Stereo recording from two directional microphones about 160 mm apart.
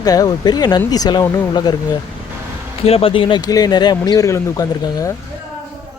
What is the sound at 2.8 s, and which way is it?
Speech, 35° left (ahead or behind).